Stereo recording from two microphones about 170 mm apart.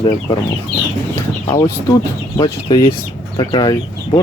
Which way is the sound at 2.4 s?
25° left (ahead or behind).